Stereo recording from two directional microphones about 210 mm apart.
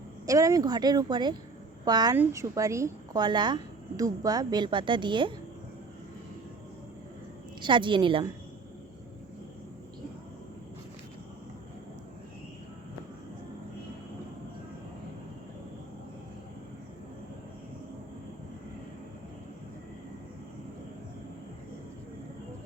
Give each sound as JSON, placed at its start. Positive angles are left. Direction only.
{"t": 0.3, "sound": "speech", "side_deg": -15}
{"t": 7.6, "sound": "speech", "side_deg": -25}